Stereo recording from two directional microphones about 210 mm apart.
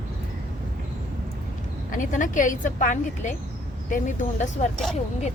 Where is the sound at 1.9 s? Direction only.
40° left (ahead or behind).